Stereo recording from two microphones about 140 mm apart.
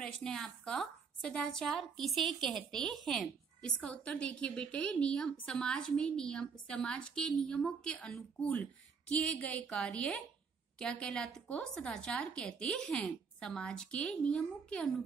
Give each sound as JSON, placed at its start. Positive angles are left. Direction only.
{"t": 0.0, "sound": "a woman's voice", "side_deg": 5}